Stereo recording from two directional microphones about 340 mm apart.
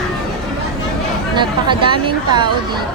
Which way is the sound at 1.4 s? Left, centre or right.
Centre.